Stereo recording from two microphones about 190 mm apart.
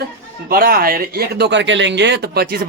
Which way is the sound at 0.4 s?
50° right (ahead or behind).